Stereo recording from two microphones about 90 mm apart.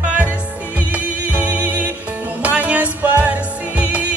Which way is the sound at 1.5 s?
20° right (ahead or behind).